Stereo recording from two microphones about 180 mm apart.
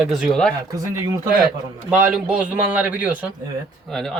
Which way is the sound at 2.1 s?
5° right (ahead or behind).